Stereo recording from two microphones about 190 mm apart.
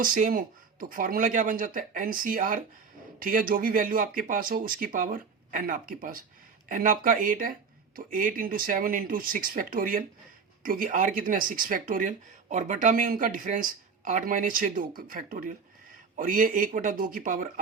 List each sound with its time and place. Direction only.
0.0 s speech: 45° right (ahead or behind)